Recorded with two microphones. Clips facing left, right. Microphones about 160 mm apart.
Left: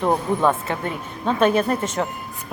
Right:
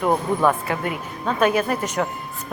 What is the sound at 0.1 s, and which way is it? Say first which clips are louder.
Speech: right 1 dB; 20° left (ahead or behind).